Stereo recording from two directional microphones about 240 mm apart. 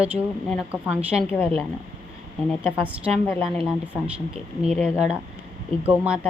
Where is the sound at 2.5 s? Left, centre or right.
Centre.